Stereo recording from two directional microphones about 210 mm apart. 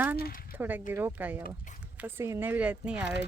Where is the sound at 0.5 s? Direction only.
10° right (ahead or behind).